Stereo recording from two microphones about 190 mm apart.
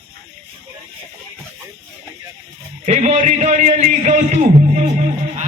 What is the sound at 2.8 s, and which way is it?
A man's voice, 35° right (ahead or behind).